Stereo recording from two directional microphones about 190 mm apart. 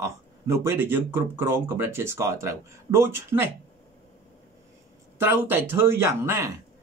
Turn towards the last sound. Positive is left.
turn(degrees=-15)  # may be behind; listen again after turning